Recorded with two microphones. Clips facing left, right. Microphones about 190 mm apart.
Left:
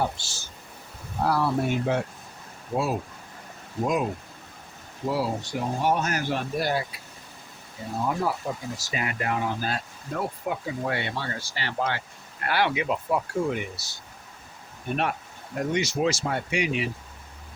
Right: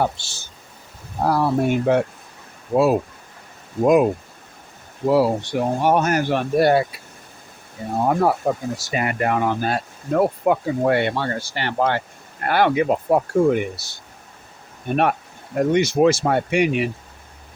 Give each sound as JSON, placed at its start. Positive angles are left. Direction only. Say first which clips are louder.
{"t": 0.0, "sound": "speech", "louder": "right 5 dB", "side_deg": -65}
{"t": 1.2, "sound": "speech", "louder": "right 5 dB", "side_deg": -45}
{"t": 2.7, "sound": "speech", "louder": "right 10 dB", "side_deg": -65}
{"t": 7.9, "sound": "speech", "louder": "right 8 dB", "side_deg": -60}
{"t": 15.7, "sound": "speech", "louder": "right 9 dB", "side_deg": -55}